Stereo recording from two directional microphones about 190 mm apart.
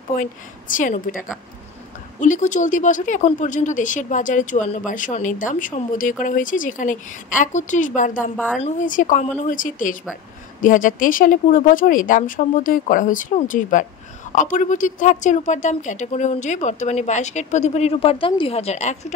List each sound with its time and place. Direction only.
0.2 s speech: 45° left (ahead or behind)